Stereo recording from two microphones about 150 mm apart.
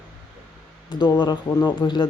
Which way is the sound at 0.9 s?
30° left (ahead or behind).